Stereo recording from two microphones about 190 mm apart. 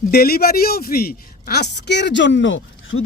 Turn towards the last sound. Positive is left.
turn(degrees=75)  # may be behind; listen again after turning